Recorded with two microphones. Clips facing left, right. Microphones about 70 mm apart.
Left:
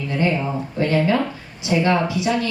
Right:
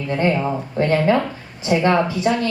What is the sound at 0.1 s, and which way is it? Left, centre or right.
Speech, right.